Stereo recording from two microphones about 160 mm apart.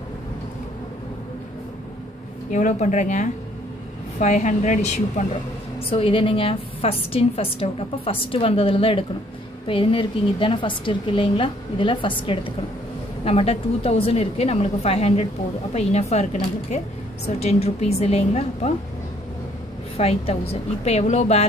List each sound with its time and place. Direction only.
2.5 s a woman's voice: 50° left (ahead or behind)
5.8 s a woman's voice: 35° left (ahead or behind)
17.4 s a woman's voice: 40° left (ahead or behind)
20.0 s a woman's voice: 40° left (ahead or behind)